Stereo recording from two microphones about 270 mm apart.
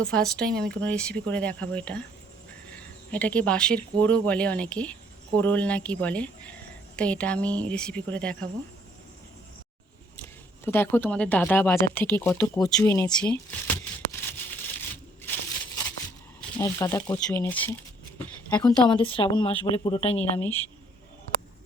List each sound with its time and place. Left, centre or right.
0.0 s speech: centre
3.1 s speech: centre
10.7 s speech: centre
14.3 s a sound: centre
16.6 s speech: centre
18.9 s a woman's voice: centre
20.3 s speech: centre